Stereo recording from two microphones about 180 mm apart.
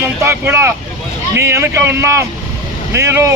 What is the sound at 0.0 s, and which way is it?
Speech, 15° right (ahead or behind).